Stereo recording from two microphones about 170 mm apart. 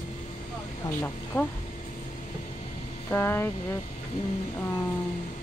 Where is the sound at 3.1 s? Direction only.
15° left (ahead or behind).